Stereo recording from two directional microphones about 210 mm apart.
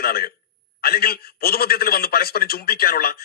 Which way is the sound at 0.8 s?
45° left (ahead or behind).